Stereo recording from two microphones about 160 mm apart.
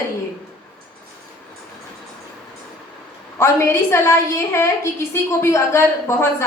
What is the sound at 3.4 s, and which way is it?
A woman's voice, 15° left (ahead or behind).